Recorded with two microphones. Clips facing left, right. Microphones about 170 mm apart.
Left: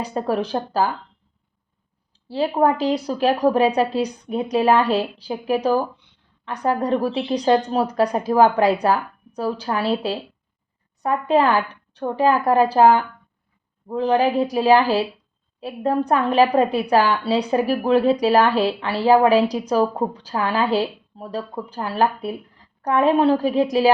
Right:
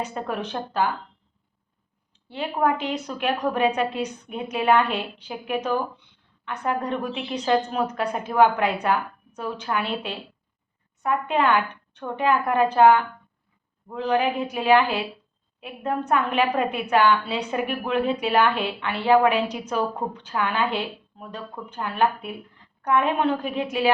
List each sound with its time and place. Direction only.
0.0 s a woman's voice: 35° left (ahead or behind)
2.1 s a woman's voice: 35° left (ahead or behind)